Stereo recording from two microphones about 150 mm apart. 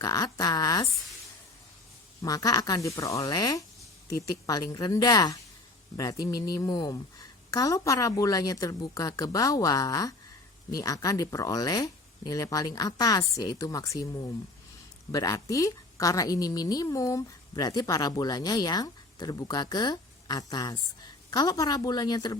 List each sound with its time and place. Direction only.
0.0 s a woman's voice: 25° left (ahead or behind)
2.2 s a woman's voice: 25° left (ahead or behind)